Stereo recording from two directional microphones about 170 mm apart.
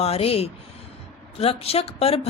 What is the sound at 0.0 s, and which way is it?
Speech, 35° left (ahead or behind).